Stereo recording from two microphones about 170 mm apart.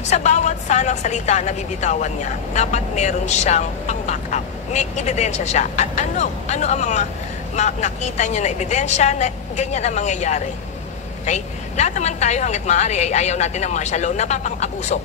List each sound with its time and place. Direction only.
0.0 s a woman's voice: 40° left (ahead or behind)